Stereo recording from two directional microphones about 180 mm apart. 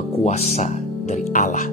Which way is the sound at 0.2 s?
40° left (ahead or behind).